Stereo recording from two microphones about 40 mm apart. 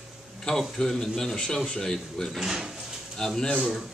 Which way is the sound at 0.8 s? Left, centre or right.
Centre.